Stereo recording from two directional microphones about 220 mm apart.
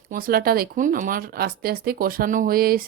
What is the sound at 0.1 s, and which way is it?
Speech, 40° right (ahead or behind).